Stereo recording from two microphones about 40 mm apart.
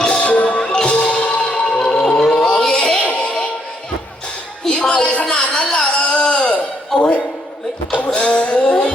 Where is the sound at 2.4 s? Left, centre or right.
Centre.